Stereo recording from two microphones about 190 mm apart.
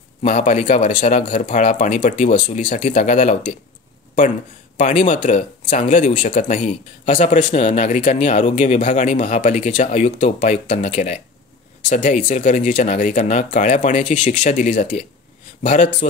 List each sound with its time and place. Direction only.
0.2 s speech: 40° left (ahead or behind)
4.7 s speech: 40° left (ahead or behind)